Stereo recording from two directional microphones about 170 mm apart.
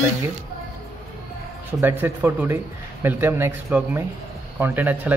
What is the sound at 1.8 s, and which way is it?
Speech, 10° right (ahead or behind).